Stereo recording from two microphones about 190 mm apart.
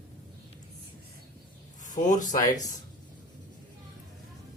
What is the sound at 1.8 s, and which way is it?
Speech, 40° left (ahead or behind).